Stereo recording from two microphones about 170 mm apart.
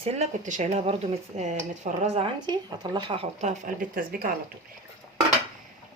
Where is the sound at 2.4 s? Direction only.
25° right (ahead or behind); by 4.3 s 55° right (ahead or behind).